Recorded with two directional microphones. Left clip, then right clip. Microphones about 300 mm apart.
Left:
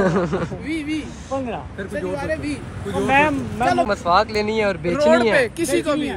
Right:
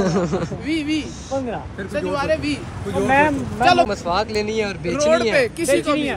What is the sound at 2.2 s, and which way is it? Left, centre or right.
Speech, centre.